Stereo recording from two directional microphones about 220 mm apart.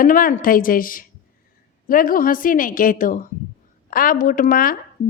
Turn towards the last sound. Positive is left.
turn(degrees=40)  # may be behind; listen again after turning